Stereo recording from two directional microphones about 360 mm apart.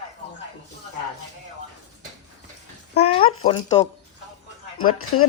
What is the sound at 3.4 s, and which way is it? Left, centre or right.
Speech, centre.